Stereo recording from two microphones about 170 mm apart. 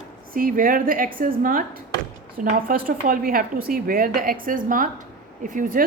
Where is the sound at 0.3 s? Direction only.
55° right (ahead or behind).